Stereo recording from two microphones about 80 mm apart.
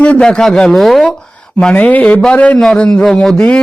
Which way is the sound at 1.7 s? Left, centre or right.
Centre.